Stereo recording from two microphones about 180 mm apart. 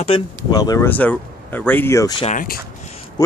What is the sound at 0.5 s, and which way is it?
Speech, 20° left (ahead or behind).